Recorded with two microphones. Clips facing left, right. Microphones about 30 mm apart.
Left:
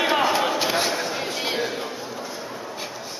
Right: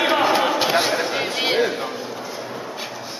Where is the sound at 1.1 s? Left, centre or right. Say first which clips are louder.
Right 6 dB; right.